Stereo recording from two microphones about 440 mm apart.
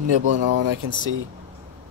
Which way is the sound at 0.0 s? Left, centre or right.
Right.